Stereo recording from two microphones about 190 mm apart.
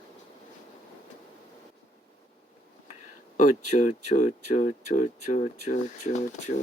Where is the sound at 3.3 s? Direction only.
40° left (ahead or behind).